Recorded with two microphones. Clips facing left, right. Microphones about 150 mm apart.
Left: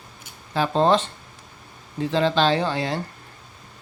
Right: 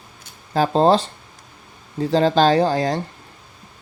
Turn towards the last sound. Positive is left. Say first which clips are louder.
# right 6 dB
turn(degrees=-40)  # may be behind; listen again after turning